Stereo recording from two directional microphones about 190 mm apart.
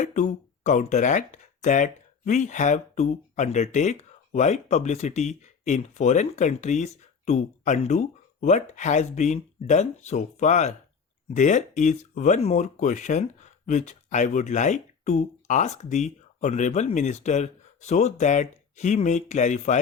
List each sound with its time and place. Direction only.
0.0 s speech: 40° left (ahead or behind)